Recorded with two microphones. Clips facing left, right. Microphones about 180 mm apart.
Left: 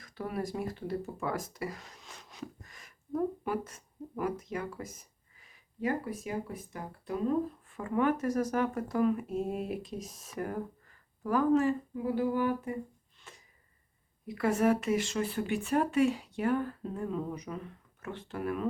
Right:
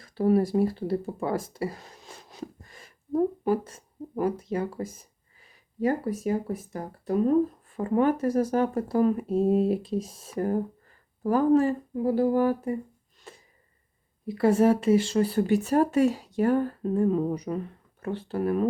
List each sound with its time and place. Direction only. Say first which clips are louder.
0.0 s speech: right 13 dB; 30° right (ahead or behind)
13.3 s a sound: right 7 dB; 35° right (ahead or behind)
14.3 s speech: right 6 dB; 30° right (ahead or behind)